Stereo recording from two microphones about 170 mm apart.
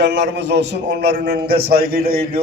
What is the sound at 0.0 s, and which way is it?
A man's voice, 90° right.